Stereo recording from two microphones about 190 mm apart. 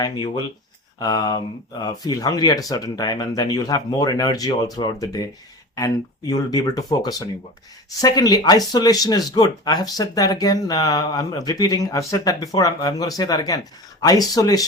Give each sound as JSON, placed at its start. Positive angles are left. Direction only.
{"t": 0.0, "sound": "speech", "side_deg": 25}